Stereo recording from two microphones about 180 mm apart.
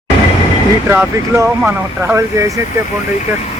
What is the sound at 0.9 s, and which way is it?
Speech, 15° right (ahead or behind).